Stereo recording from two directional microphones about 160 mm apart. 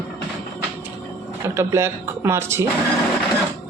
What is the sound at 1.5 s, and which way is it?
Speech, 15° right (ahead or behind).